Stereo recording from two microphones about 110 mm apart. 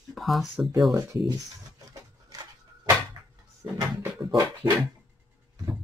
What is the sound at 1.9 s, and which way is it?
Wood, 35° right (ahead or behind).